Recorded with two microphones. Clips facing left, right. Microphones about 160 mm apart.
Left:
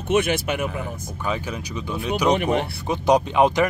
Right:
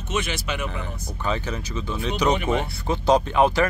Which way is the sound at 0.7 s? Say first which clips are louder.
Left 3 dB; 5° left (ahead or behind).